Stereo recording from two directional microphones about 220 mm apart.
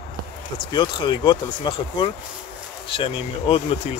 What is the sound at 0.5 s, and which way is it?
Speech, 20° left (ahead or behind).